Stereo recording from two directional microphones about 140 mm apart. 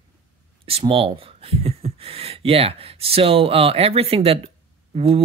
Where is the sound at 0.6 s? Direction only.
45° right (ahead or behind).